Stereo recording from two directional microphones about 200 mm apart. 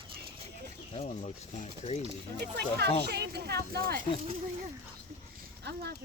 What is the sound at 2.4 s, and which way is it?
Speech, 55° right (ahead or behind).